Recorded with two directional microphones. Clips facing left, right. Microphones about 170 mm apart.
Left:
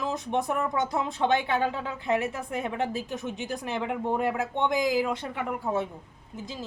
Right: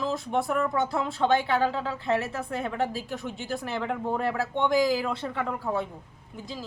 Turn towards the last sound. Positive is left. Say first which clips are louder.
# even
turn(degrees=20)  # may be behind; listen again after turning